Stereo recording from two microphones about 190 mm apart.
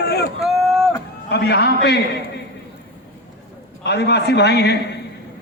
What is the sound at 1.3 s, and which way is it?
Speech, 60° left (ahead or behind).